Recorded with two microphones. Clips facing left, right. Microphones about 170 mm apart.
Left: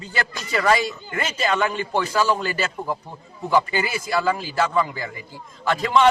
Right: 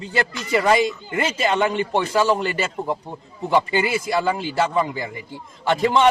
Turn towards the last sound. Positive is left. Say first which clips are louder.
# right 1 dB
turn(degrees=-25)  # may be behind; listen again after turning